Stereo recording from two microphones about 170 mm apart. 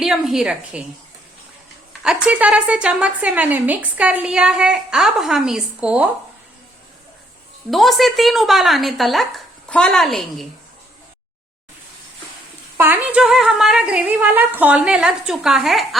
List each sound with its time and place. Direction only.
0.0 s speech: centre (ahead or behind)
1.9 s a woman's voice: 5° right (ahead or behind)
7.7 s speech: centre (ahead or behind)
12.7 s speech: 10° right (ahead or behind)